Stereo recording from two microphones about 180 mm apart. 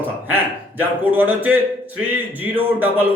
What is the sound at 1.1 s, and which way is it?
A man's voice, 10° right (ahead or behind).